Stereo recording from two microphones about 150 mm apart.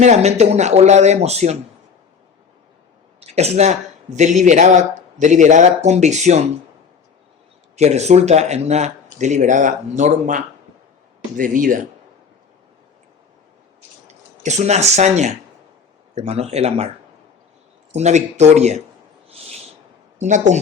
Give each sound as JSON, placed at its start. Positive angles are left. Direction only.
{"t": 0.0, "sound": "speech", "side_deg": -50}
{"t": 3.2, "sound": "speech", "side_deg": -45}
{"t": 7.8, "sound": "speech", "side_deg": -50}
{"t": 14.1, "sound": "speech", "side_deg": -50}
{"t": 17.9, "sound": "speech", "side_deg": -50}
{"t": 20.1, "sound": "a woman's voice", "side_deg": -55}